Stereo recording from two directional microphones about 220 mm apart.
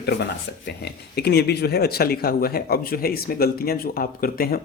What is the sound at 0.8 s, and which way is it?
Speech, 50° left (ahead or behind).